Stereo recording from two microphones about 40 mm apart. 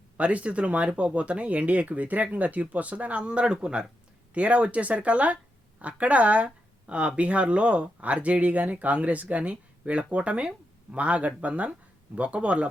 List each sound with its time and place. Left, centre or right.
0.2 s speech: right